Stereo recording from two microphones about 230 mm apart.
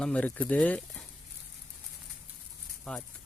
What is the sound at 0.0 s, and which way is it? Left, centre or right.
Speech, centre.